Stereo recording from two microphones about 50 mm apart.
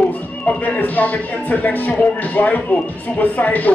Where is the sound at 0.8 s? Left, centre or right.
Left.